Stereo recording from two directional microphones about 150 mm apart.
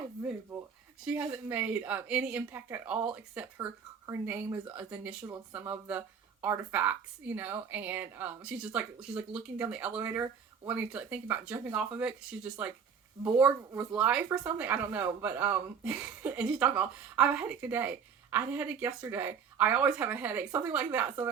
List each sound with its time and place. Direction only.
0.5 s speech: 5° right (ahead or behind)